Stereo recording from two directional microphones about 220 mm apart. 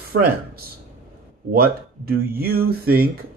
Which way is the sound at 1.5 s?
45° right (ahead or behind).